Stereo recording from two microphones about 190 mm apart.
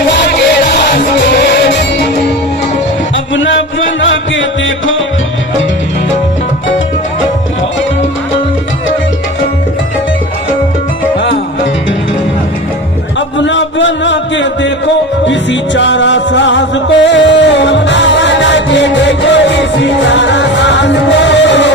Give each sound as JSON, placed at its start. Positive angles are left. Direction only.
{"t": 0.2, "sound": "music", "side_deg": 60}
{"t": 3.3, "sound": "music", "side_deg": 85}
{"t": 13.1, "sound": "music", "side_deg": 75}